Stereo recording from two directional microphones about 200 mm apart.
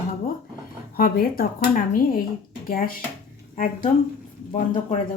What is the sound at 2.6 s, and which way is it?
Speech, 45° left (ahead or behind).